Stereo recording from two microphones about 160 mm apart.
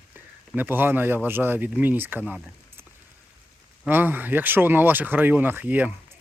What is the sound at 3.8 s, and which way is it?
Speech, 10° right (ahead or behind).